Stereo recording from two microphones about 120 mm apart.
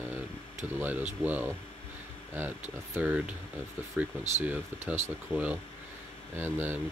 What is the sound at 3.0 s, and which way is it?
Speech, 10° right (ahead or behind).